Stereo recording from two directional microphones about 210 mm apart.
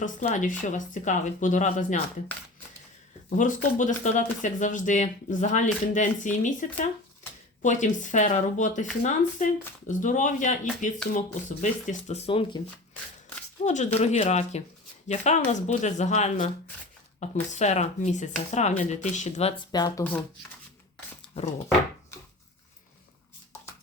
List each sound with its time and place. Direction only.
0.0 s speech: 35° left (ahead or behind)
3.2 s speech: 40° left (ahead or behind)
13.7 s speech: 30° left (ahead or behind)